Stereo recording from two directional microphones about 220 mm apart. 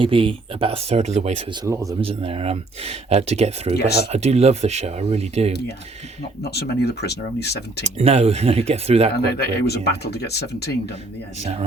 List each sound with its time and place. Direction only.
0.0 s speech: 25° right (ahead or behind)
1.6 s speech: 15° right (ahead or behind)
2.0 s speech: 25° right (ahead or behind)
3.8 s speech: 45° left (ahead or behind)
4.1 s speech: 30° right (ahead or behind)
6.4 s speech: 45° left (ahead or behind)
7.9 s speech: 30° right (ahead or behind)
9.4 s speech: 45° left (ahead or behind)
11.3 s speech: 30° right (ahead or behind)